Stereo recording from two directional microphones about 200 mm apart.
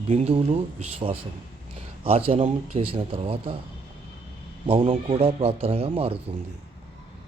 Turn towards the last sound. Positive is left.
turn(degrees=-30)  # may be behind; listen again after turning